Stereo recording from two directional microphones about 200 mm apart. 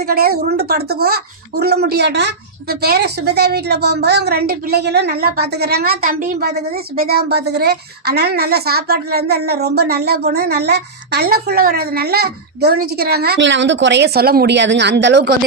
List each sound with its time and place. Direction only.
0.0 s speech: 50° right (ahead or behind)